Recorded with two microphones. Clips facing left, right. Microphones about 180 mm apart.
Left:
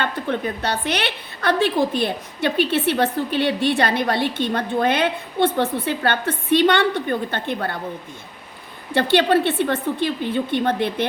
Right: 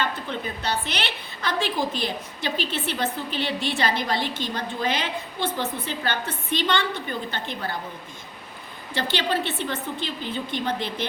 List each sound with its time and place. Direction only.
0.0 s a woman's voice: 60° left (ahead or behind)
8.9 s a woman's voice: 60° left (ahead or behind)